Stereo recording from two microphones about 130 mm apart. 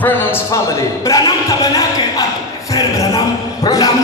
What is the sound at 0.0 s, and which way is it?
Speech, 15° left (ahead or behind).